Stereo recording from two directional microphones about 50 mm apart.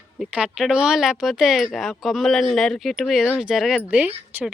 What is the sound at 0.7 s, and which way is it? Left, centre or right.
Speech, centre.